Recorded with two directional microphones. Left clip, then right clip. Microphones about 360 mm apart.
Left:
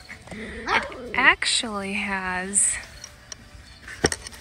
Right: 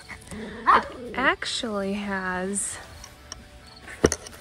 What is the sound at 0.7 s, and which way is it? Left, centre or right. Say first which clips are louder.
Speech: even; centre.